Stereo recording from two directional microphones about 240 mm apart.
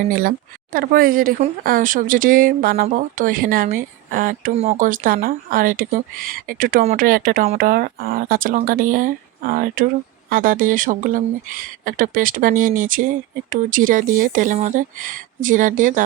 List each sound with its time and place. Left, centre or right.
0.1 s speech: right